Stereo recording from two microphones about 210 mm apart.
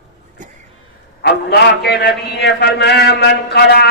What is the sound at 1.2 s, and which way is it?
A man's voice, 50° left (ahead or behind).